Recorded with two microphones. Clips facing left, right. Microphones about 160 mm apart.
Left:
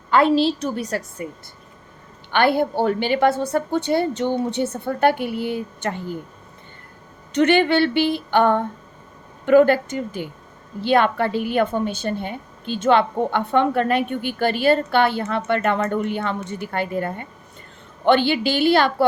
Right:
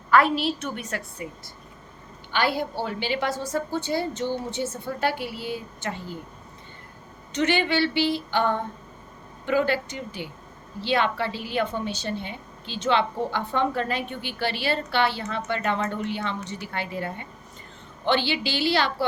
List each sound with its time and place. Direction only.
0.1 s a woman's voice: 25° left (ahead or behind)
2.3 s a woman's voice: 55° left (ahead or behind)
7.3 s a woman's voice: 55° left (ahead or behind)